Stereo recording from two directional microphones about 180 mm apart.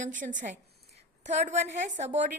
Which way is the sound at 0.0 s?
45° right (ahead or behind).